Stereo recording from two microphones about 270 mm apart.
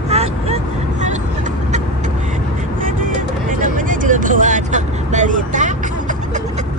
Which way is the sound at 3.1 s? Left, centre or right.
Right.